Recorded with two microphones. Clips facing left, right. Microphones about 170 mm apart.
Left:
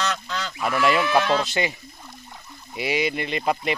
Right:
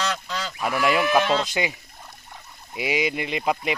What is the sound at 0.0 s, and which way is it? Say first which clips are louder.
Speech: even; 5° right (ahead or behind).